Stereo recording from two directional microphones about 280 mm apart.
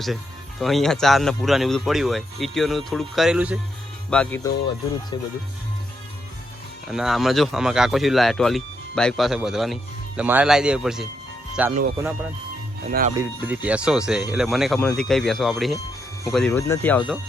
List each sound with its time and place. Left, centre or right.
0.6 s speech: centre
6.8 s speech: centre
11.7 s speech: right
13.1 s speech: centre